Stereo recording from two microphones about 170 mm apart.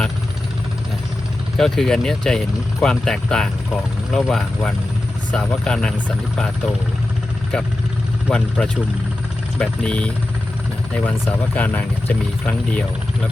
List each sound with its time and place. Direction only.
1.5 s speech: 5° left (ahead or behind)
8.3 s speech: 5° left (ahead or behind)